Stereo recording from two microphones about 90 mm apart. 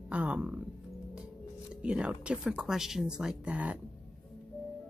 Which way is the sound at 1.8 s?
15° right (ahead or behind).